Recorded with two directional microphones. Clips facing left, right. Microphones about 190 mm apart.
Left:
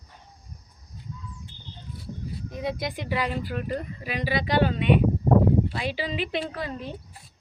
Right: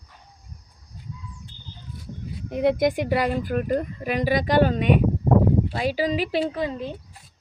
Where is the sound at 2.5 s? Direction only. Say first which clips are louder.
Right 11 dB; 60° right (ahead or behind); by 6.4 s 40° right (ahead or behind).